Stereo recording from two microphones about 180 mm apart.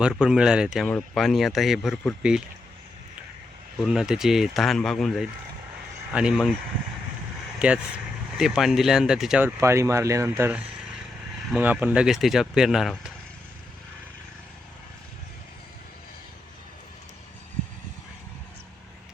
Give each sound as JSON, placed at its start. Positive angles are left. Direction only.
{"t": 0.0, "sound": "speech", "side_deg": -5}
{"t": 3.8, "sound": "speech", "side_deg": -5}
{"t": 7.6, "sound": "speech", "side_deg": -5}
{"t": 9.6, "sound": "speech", "side_deg": -15}